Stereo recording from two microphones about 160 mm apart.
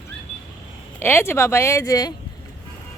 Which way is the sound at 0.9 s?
15° left (ahead or behind).